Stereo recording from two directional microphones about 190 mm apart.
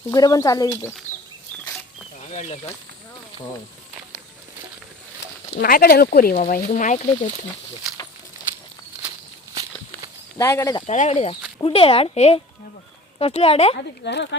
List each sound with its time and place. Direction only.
0.1 s speech: 20° left (ahead or behind)
2.3 s speech: 35° left (ahead or behind)
5.6 s speech: 50° left (ahead or behind)
10.3 s speech: 15° left (ahead or behind)
10.8 s speech: 35° left (ahead or behind)
13.7 s speech: 60° left (ahead or behind)